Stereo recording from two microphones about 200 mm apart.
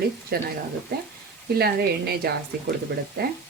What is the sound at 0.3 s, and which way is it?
Speech, 50° right (ahead or behind).